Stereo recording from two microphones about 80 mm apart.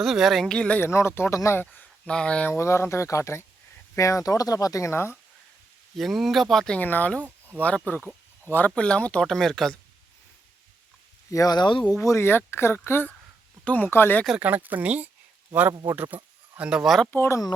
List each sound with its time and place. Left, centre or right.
0.0 s speech: centre
0.4 s speech: centre
0.8 s speech: left
1.6 s a sound: centre
2.1 s speech: centre
2.5 s speech: left
6.0 s speech: centre
6.7 s speech: left; by 9.7 s centre
11.3 s speech: left
11.5 s speech: left
12.0 s speech: left
14.3 s speech: right; by 17.1 s centre
17.1 s speech: left